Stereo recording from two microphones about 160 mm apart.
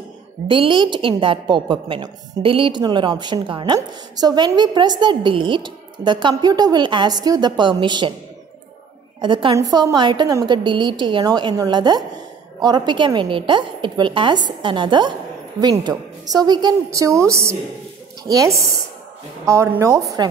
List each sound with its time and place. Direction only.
0.5 s a woman's voice: 30° right (ahead or behind)
9.2 s a woman's voice: 30° right (ahead or behind)